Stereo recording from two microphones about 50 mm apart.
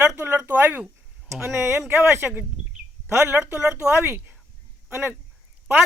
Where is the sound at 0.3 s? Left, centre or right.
Right.